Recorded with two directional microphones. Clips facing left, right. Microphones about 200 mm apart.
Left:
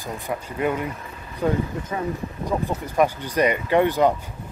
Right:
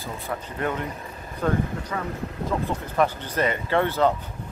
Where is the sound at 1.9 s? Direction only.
20° left (ahead or behind).